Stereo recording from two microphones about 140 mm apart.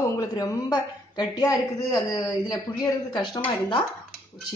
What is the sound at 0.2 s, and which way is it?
A woman's voice, 25° left (ahead or behind).